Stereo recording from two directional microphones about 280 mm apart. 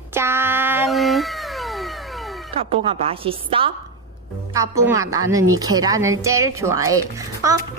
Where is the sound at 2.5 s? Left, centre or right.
Centre.